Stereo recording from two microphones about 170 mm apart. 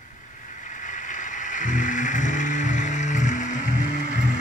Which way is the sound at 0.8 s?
50° left (ahead or behind).